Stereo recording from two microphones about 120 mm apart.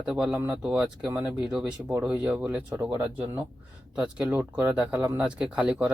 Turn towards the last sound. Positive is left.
turn(degrees=-10)  # may be behind; listen again after turning